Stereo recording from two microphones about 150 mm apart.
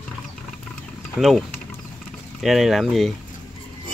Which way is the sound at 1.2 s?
Centre (ahead or behind).